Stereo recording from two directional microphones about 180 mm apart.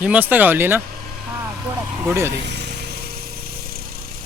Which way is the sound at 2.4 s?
70° right (ahead or behind).